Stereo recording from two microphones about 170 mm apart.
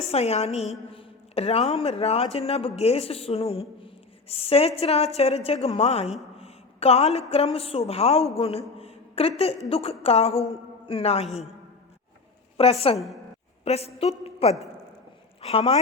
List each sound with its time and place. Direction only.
0.0 s a woman's voice: 40° left (ahead or behind)
12.5 s a woman's voice: 35° left (ahead or behind)